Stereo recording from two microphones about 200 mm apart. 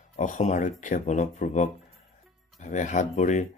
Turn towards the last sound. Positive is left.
turn(degrees=35)  # may be behind; listen again after turning